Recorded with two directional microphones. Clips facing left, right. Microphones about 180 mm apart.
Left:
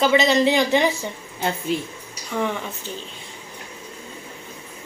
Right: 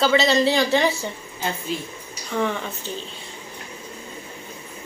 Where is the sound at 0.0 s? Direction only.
15° left (ahead or behind).